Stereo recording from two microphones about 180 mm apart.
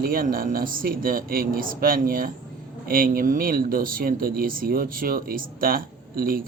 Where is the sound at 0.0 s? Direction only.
50° right (ahead or behind).